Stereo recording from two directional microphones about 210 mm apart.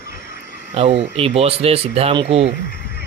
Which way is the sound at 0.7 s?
30° right (ahead or behind).